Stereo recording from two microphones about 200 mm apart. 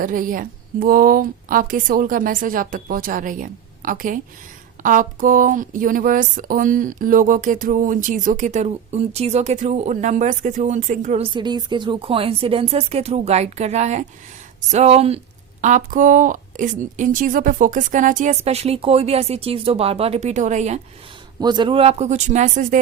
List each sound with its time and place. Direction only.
0.0 s a woman's voice: 40° right (ahead or behind)
11.3 s a woman's voice: 20° right (ahead or behind)
21.4 s a woman's voice: 20° right (ahead or behind); by 22.8 s 40° right (ahead or behind)